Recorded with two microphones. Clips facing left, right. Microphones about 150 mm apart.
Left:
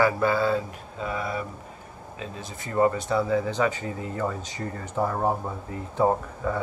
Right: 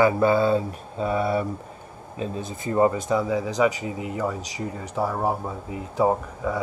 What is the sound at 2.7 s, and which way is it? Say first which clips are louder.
Speech: right 2 dB; 20° right (ahead or behind).